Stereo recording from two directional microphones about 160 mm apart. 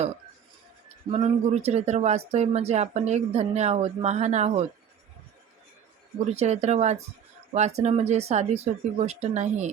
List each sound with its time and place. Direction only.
1.1 s speech: 40° right (ahead or behind)
6.1 s speech: 45° right (ahead or behind)